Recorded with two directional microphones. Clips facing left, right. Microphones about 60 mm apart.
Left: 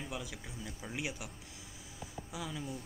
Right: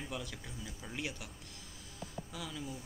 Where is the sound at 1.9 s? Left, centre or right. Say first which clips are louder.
Left 1 dB; centre.